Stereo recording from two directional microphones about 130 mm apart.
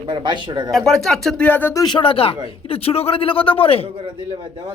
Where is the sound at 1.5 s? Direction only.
15° left (ahead or behind).